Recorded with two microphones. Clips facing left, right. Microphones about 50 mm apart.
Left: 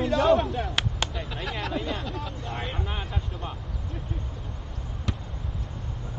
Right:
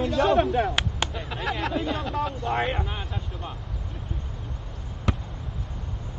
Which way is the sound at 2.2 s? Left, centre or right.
Right.